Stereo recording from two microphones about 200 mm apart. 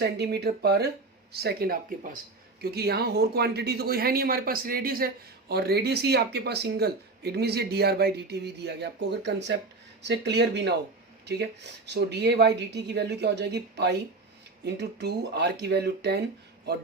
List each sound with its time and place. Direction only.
0.0 s speech: 55° right (ahead or behind)
11.9 s speech: 55° right (ahead or behind)